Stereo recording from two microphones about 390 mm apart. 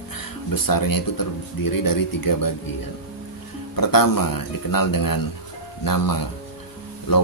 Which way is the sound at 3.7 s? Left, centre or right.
Left.